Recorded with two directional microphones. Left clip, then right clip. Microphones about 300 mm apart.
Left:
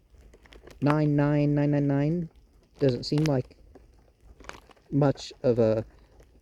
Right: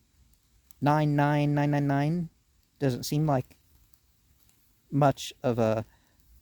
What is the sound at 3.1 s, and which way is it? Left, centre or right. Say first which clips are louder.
Speech: left 4 dB; right.